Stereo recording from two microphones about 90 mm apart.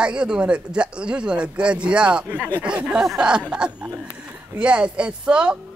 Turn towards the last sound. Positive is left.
turn(degrees=-10)  # may be behind; listen again after turning